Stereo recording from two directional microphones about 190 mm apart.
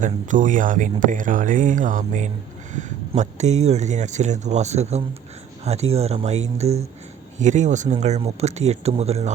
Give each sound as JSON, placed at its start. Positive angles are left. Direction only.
{"t": 0.0, "sound": "speech", "side_deg": -40}